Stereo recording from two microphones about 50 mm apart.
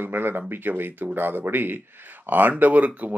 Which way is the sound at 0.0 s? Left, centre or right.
Right.